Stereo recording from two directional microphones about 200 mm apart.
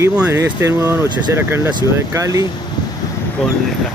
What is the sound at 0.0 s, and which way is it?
Speech, 15° right (ahead or behind).